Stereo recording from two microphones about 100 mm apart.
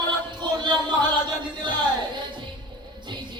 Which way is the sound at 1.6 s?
50° right (ahead or behind).